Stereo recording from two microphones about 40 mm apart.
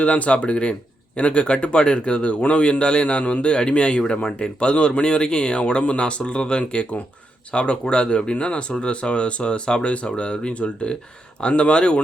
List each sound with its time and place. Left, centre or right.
0.0 s speech: left